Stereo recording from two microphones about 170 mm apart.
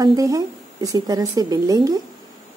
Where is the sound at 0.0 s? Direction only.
20° right (ahead or behind).